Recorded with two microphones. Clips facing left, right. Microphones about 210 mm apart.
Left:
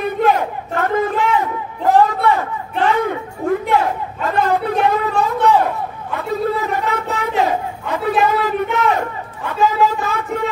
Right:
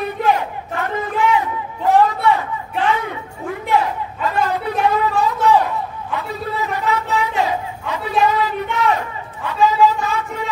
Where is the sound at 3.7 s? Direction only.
50° left (ahead or behind).